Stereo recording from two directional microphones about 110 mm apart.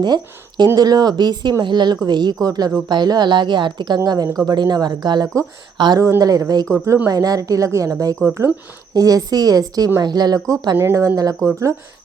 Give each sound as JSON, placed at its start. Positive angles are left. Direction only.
{"t": 0.0, "sound": "speech", "side_deg": -40}
{"t": 5.7, "sound": "speech", "side_deg": -45}
{"t": 6.0, "sound": "speech", "side_deg": -30}
{"t": 10.8, "sound": "speech", "side_deg": -25}